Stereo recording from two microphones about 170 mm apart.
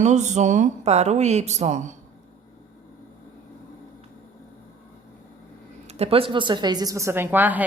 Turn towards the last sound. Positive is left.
turn(degrees=-10)  # may be behind; listen again after turning